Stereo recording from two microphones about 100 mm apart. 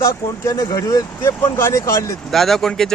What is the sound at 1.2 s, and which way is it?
Speech, 25° left (ahead or behind).